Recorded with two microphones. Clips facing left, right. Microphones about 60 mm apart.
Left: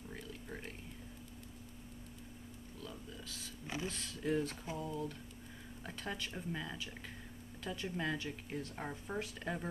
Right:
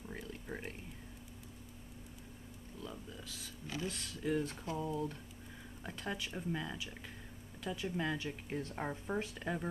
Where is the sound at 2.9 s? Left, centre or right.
Centre.